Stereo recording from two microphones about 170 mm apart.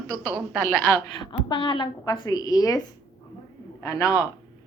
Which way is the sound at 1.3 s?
30° left (ahead or behind).